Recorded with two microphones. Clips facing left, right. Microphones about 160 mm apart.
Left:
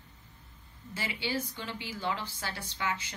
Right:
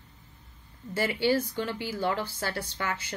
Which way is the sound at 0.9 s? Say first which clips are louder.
Right 9 dB; 50° right (ahead or behind).